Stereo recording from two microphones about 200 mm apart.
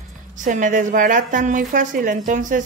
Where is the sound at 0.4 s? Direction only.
40° right (ahead or behind).